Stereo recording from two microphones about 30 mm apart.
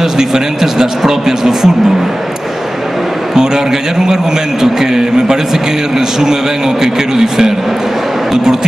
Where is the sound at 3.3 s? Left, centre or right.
Right.